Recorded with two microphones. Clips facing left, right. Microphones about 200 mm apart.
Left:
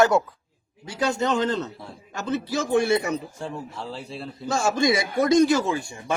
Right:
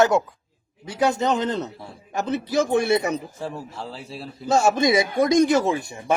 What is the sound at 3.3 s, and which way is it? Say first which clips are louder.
A man's voice: right 1 dB; 5° right (ahead or behind).